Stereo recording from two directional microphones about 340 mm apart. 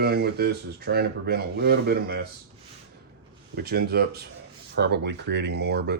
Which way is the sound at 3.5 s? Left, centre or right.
Right.